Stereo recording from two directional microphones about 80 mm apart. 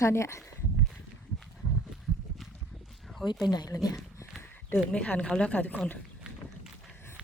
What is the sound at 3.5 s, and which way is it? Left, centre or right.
Speech, left.